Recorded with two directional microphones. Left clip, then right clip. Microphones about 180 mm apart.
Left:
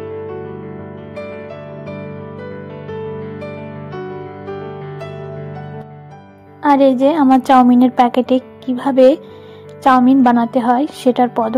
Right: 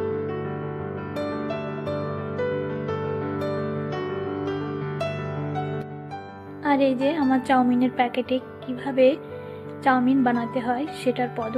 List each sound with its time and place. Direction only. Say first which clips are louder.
6.6 s a woman's voice: left 10 dB; 35° left (ahead or behind)